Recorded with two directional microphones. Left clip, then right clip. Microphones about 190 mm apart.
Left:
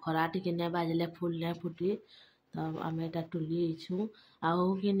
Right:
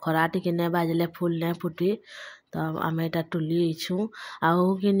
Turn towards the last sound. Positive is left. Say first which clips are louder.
# right 7 dB
turn(degrees=-40)  # may be behind; listen again after turning